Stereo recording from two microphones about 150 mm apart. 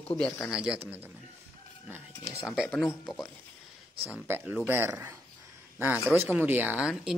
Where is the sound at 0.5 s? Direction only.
5° right (ahead or behind).